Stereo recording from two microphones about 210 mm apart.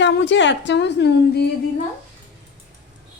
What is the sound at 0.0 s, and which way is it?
Speech, 60° left (ahead or behind).